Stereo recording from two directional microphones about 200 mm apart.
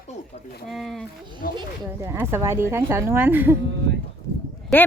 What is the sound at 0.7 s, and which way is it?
Speech, centre (ahead or behind).